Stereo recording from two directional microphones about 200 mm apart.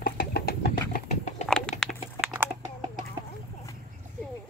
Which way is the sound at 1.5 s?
5° left (ahead or behind).